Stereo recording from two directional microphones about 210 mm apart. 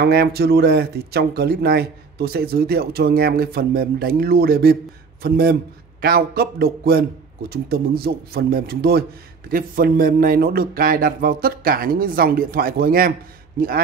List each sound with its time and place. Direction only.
0.0 s speech: 50° right (ahead or behind)